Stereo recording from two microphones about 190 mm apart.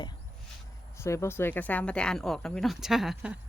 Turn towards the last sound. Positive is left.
turn(degrees=-5)  # may be behind; listen again after turning